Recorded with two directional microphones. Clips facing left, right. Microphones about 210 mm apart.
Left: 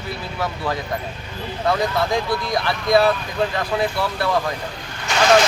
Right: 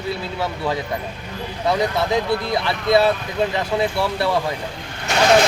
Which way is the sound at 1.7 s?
20° right (ahead or behind).